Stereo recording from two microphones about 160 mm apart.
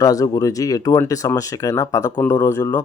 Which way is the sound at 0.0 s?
20° left (ahead or behind).